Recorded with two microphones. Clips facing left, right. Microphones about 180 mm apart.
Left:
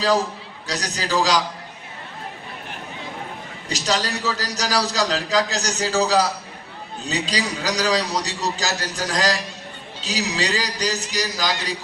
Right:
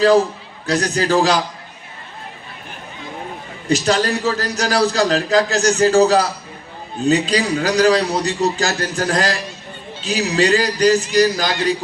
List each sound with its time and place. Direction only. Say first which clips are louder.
0.7 s a man's voice: right 8 dB; 55° right (ahead or behind)
3.7 s a man's voice: right 7 dB; 50° right (ahead or behind)